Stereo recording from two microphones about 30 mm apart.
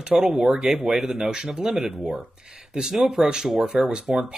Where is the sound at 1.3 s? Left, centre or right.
Right.